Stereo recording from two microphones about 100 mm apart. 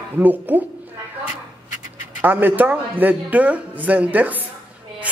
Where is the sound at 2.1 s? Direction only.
20° right (ahead or behind).